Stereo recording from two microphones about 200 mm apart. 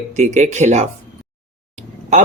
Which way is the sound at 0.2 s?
35° right (ahead or behind).